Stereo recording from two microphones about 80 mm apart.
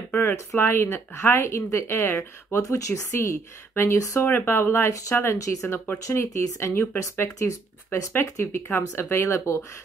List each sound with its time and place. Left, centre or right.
0.1 s speech: left
2.6 s speech: left
7.0 s speech: left